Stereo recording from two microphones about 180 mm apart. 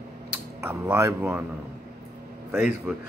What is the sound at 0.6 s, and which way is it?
Speech, 15° right (ahead or behind).